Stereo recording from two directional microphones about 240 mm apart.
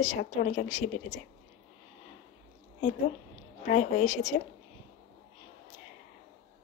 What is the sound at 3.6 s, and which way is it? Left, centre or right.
Speech, left.